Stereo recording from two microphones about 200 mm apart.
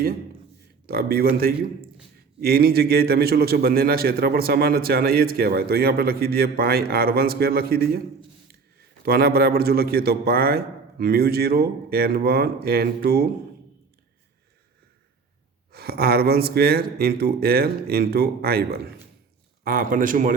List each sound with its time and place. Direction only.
0.9 s a man's voice: 50° right (ahead or behind)
9.0 s a man's voice: 50° right (ahead or behind)
15.7 s a man's voice: 50° right (ahead or behind)